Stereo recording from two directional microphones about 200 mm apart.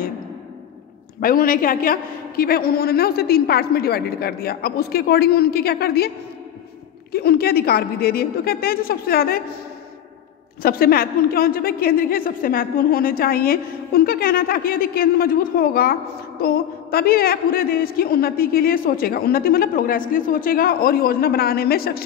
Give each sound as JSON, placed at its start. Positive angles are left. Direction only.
{"t": 1.2, "sound": "a woman's voice", "side_deg": 45}
{"t": 10.6, "sound": "a woman's voice", "side_deg": 50}